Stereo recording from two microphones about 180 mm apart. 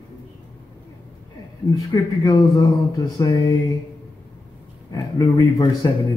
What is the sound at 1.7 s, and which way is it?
Speech, 20° left (ahead or behind).